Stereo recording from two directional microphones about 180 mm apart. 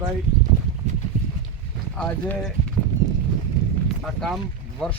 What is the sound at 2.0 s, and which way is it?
Speech, 10° left (ahead or behind).